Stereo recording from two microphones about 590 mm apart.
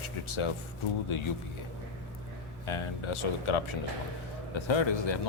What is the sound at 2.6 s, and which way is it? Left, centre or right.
Speech, left.